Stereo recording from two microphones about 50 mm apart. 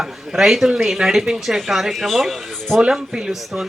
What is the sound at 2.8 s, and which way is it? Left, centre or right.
Speech, centre.